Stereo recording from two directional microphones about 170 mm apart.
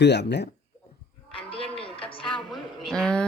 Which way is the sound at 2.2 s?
Centre (ahead or behind).